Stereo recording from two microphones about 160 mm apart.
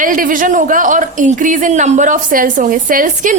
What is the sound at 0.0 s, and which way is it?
A woman's voice, 55° right (ahead or behind).